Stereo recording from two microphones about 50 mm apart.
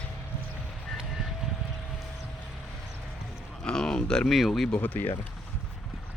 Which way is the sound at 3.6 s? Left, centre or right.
Centre.